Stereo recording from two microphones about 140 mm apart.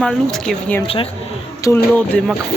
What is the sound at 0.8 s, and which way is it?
Speech, 40° left (ahead or behind).